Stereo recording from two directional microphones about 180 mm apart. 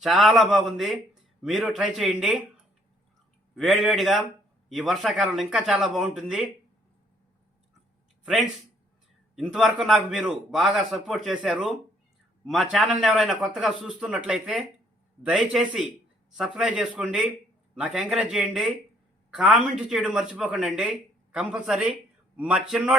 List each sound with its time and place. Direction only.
0.0 s a man's voice: centre (ahead or behind)
3.5 s a man's voice: centre (ahead or behind)
8.2 s a man's voice: centre (ahead or behind)